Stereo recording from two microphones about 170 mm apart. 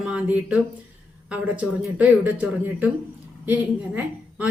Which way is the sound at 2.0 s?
10° right (ahead or behind).